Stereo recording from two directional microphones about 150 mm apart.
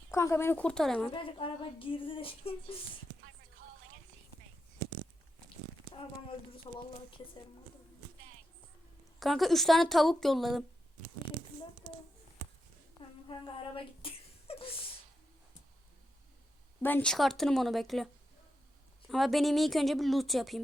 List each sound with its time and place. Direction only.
0.1 s speech: 20° left (ahead or behind)
1.1 s speech: 35° left (ahead or behind)
6.7 s speech: 30° left (ahead or behind)
9.2 s a woman's voice: centre (ahead or behind)
13.0 s a sound: 35° left (ahead or behind)
16.8 s a woman's voice: 10° left (ahead or behind)